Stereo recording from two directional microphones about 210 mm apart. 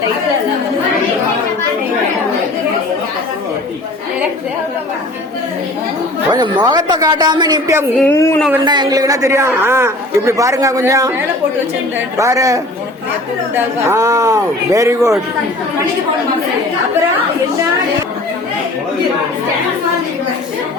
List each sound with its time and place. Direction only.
6.3 s a woman's voice: 20° right (ahead or behind)
8.1 s speech: 10° left (ahead or behind)
8.6 s a man's voice: 20° right (ahead or behind)
12.1 s a man's voice: 15° right (ahead or behind)
13.8 s a man's voice: 15° right (ahead or behind)